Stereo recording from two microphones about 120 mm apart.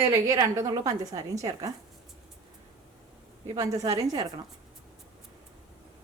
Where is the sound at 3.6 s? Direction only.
30° right (ahead or behind).